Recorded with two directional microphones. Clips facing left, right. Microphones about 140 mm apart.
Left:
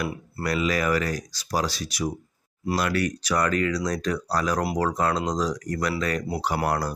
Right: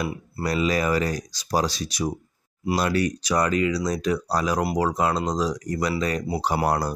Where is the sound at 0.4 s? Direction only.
25° right (ahead or behind).